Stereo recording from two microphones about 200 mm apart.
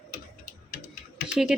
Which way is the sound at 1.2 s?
5° right (ahead or behind).